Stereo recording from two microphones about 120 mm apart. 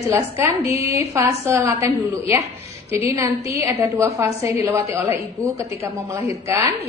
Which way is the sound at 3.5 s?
20° right (ahead or behind).